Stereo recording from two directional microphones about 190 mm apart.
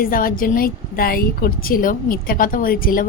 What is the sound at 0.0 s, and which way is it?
A woman's voice, 50° left (ahead or behind).